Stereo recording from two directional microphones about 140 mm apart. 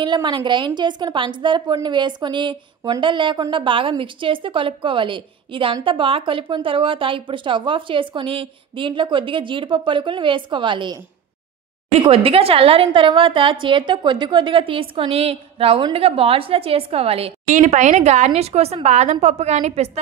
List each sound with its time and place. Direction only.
0.0 s a woman's voice: 35° right (ahead or behind)
12.0 s a woman's voice: 40° right (ahead or behind)
17.5 s speech: 60° right (ahead or behind)